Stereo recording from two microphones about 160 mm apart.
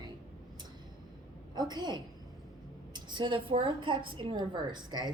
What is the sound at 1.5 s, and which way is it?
A woman's voice, 25° right (ahead or behind).